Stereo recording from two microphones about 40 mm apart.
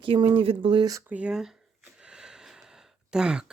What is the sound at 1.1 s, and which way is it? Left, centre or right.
Speech, right.